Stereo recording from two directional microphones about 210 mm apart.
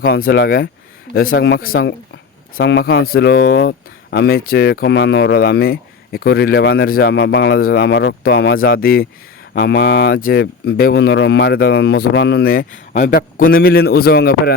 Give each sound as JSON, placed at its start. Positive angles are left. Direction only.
{"t": 0.0, "sound": "speech", "side_deg": 45}